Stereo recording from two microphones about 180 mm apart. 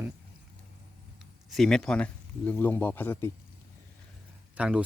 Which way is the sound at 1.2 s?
Centre (ahead or behind).